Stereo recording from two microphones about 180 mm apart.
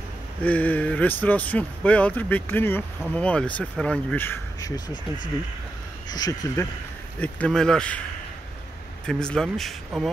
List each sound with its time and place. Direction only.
0.4 s speech: 10° left (ahead or behind)
6.0 s speech: 20° left (ahead or behind)
7.2 s speech: 5° left (ahead or behind)
9.0 s speech: 5° left (ahead or behind)